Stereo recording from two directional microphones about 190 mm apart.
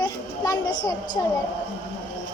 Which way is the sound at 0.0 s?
20° left (ahead or behind).